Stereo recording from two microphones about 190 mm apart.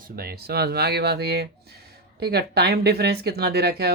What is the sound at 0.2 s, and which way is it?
Speech, 55° right (ahead or behind).